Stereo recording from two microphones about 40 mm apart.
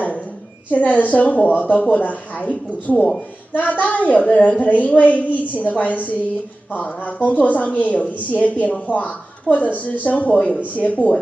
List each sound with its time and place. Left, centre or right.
0.7 s a woman's voice: left